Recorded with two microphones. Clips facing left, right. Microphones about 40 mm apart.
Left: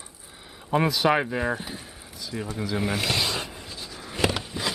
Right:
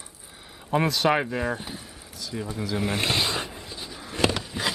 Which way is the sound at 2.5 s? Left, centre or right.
Centre.